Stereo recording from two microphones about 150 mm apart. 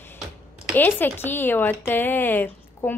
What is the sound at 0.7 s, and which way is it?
Speech, 15° left (ahead or behind).